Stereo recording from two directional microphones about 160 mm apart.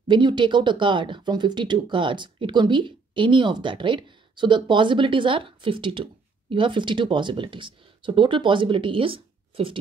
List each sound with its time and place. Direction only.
0.1 s speech: 30° right (ahead or behind)